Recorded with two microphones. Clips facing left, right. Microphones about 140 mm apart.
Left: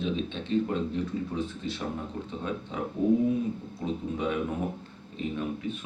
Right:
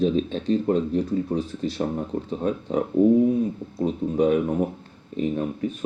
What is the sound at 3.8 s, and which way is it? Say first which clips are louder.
Speech: right 9 dB; 40° right (ahead or behind).